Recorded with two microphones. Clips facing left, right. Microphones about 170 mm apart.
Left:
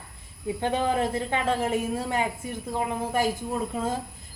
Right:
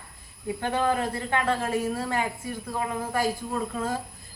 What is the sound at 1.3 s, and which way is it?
Speech, 20° left (ahead or behind).